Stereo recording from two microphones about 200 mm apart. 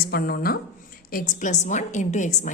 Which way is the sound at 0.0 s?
50° left (ahead or behind).